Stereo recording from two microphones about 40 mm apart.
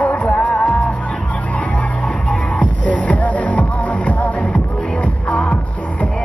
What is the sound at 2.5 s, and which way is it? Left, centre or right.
Music, left.